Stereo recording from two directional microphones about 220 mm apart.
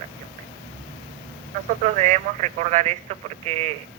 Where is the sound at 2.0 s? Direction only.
30° right (ahead or behind).